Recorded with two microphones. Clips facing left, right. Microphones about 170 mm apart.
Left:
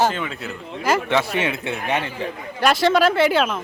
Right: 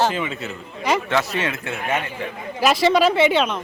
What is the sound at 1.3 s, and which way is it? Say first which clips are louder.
Speech: left 2 dB; 15° left (ahead or behind).